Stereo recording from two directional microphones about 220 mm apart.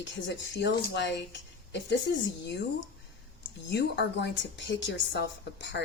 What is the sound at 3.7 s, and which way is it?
A woman's voice, 55° left (ahead or behind).